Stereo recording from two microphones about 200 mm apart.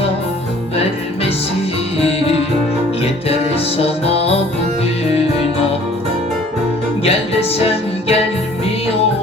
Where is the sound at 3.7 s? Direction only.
30° left (ahead or behind).